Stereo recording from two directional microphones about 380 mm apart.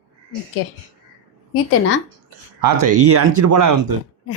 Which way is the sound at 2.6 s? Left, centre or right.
Right.